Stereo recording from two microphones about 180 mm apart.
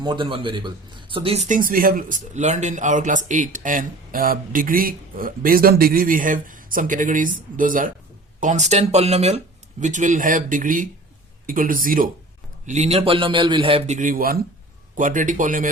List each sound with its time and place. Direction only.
0.0 s a man's voice: 25° right (ahead or behind); by 15.7 s 45° right (ahead or behind)